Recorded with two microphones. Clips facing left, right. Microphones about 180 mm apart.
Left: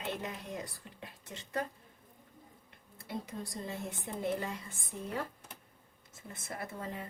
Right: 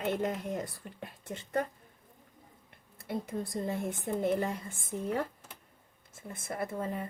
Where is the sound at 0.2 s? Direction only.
50° right (ahead or behind).